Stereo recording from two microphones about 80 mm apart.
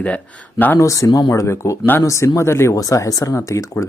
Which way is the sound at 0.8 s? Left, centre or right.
Left.